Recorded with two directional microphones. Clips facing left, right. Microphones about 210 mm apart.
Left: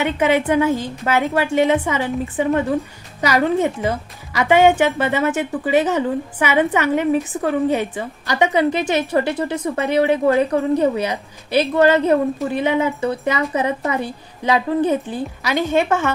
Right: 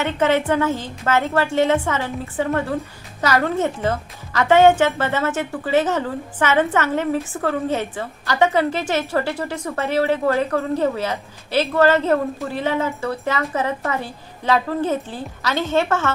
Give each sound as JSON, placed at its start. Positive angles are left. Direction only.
{"t": 0.0, "sound": "a woman's voice", "side_deg": 15}